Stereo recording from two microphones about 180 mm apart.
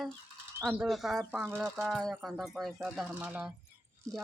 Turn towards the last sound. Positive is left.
turn(degrees=-10)  # may be behind; listen again after turning